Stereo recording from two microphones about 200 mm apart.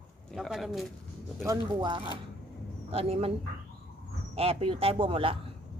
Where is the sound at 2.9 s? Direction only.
30° right (ahead or behind).